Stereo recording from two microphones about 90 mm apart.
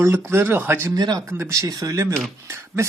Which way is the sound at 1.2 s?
30° right (ahead or behind).